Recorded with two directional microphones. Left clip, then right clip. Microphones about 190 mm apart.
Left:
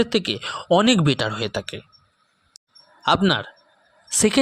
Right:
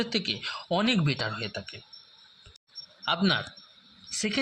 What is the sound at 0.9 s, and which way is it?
Speech, 40° left (ahead or behind).